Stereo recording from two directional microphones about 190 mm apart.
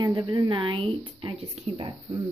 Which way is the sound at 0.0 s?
20° right (ahead or behind).